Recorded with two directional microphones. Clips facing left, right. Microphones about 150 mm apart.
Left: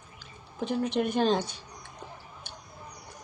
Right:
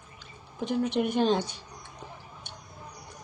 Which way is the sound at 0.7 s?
10° right (ahead or behind).